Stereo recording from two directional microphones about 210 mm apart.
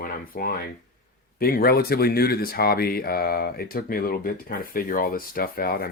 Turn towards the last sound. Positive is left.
turn(degrees=45)  # may be behind; listen again after turning